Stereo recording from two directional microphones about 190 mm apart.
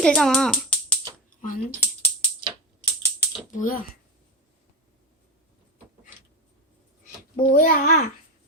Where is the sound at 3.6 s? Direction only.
50° left (ahead or behind).